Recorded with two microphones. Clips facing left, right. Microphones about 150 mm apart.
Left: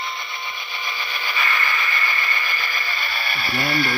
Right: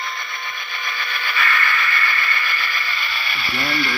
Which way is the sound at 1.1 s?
30° left (ahead or behind).